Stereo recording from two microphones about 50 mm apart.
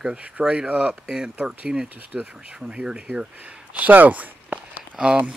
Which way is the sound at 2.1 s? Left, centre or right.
Right.